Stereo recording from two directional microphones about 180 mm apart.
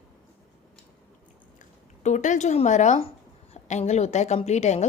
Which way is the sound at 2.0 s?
40° left (ahead or behind).